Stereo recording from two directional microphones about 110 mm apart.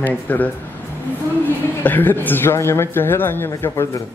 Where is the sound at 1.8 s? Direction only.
20° left (ahead or behind).